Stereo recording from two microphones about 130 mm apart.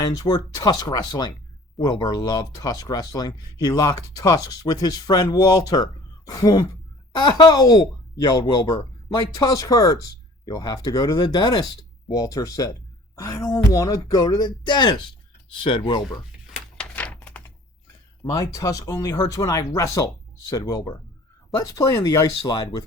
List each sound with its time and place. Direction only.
0.0 s speech: 30° left (ahead or behind)
16.7 s a sound: 10° left (ahead or behind)
18.3 s speech: 25° left (ahead or behind)